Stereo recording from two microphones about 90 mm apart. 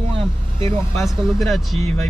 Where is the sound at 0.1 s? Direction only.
80° right.